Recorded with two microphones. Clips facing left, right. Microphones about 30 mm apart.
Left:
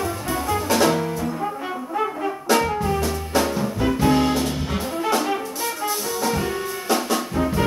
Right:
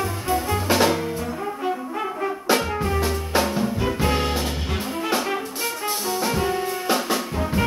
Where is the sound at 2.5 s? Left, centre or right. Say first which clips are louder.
Left 2 dB; right; by 4.9 s centre.